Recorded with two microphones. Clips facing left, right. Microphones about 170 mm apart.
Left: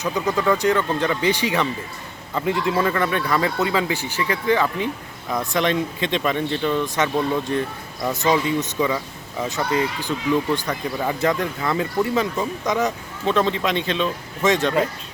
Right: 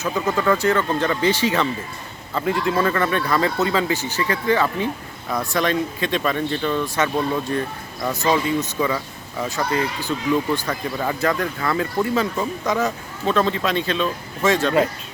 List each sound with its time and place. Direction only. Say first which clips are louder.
0.3 s speech: even; 15° left (ahead or behind)
8.1 s speech: even; 20° left (ahead or behind)